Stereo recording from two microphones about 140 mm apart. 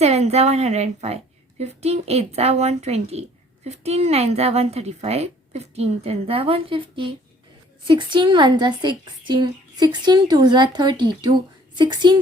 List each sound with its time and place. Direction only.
0.0 s a woman's voice: 50° right (ahead or behind); by 12.2 s 35° right (ahead or behind)